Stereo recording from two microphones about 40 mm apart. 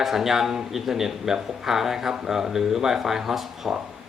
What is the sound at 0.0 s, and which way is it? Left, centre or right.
Speech, centre.